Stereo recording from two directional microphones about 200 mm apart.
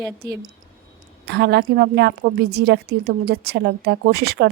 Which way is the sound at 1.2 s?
55° right (ahead or behind).